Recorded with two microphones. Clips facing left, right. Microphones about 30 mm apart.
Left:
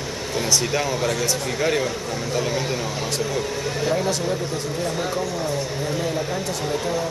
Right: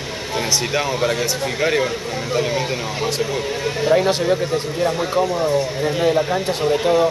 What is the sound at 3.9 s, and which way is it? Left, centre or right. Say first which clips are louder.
Speech: right 6 dB; right.